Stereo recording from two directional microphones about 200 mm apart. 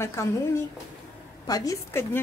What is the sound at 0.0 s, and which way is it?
Speech, 15° left (ahead or behind).